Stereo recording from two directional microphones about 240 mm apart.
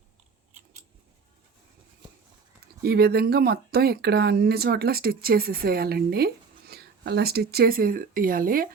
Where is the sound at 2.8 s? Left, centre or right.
Right.